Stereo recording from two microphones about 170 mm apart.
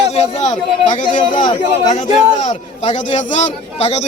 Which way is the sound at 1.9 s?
45° left (ahead or behind).